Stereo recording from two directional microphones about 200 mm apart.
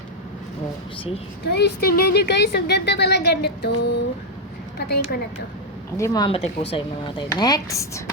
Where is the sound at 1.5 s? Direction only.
55° left (ahead or behind).